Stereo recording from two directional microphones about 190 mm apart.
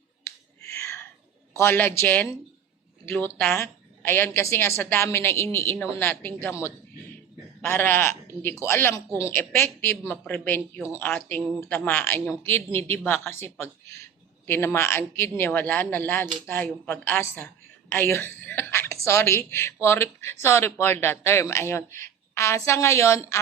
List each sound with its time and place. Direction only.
0.3 s whispering: 15° left (ahead or behind)
1.5 s speech: 15° left (ahead or behind)
7.6 s a woman's voice: 10° left (ahead or behind)